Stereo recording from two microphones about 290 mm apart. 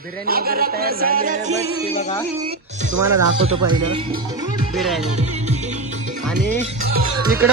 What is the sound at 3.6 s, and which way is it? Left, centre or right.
Speech, right.